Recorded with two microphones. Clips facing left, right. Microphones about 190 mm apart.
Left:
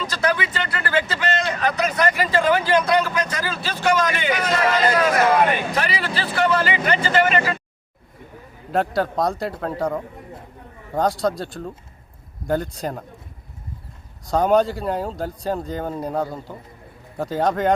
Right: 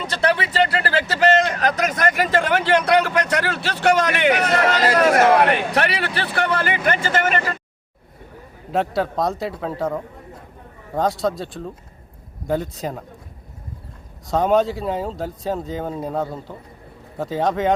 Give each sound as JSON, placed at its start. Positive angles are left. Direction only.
{"t": 0.1, "sound": "speech", "side_deg": -30}
{"t": 8.7, "sound": "speech", "side_deg": 0}
{"t": 14.3, "sound": "speech", "side_deg": 0}